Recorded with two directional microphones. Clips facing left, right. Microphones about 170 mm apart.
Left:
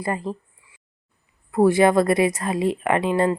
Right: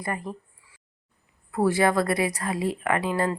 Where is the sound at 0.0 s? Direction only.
25° left (ahead or behind).